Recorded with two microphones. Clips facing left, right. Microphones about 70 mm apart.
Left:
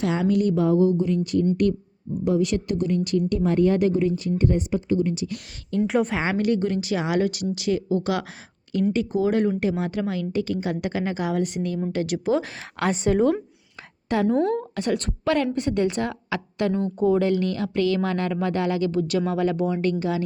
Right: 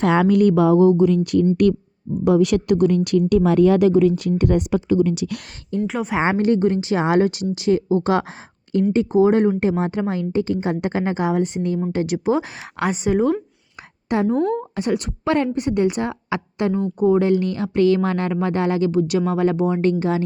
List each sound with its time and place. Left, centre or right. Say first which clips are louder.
0.0 s speech: right 6 dB; right
0.6 s speech: right 6 dB; right
5.7 s speech: even; centre
12.9 s a woman's voice: right 1 dB; centre
14.1 s speech: right 2 dB; right